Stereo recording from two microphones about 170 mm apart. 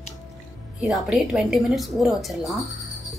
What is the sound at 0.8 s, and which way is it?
Speech, centre (ahead or behind).